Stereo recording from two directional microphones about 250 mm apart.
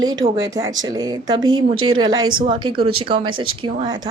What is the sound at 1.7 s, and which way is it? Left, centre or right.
Speech, right.